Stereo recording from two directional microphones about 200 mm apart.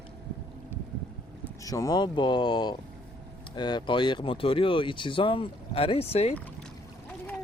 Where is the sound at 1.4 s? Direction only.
15° left (ahead or behind).